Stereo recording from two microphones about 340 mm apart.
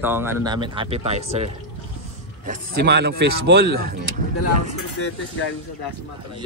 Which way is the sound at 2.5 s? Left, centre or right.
Right.